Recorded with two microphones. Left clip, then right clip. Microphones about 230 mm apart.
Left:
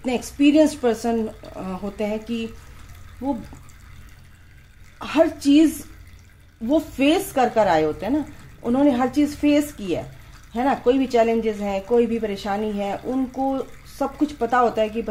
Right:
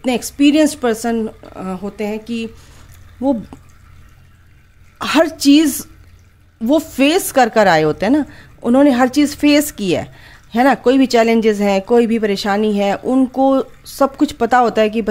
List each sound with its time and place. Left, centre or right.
0.0 s a woman's voice: right
3.2 s speech: right
4.9 s speech: right